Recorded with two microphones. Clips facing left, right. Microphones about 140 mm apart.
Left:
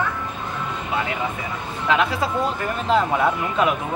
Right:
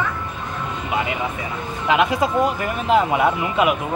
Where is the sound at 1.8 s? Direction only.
15° right (ahead or behind).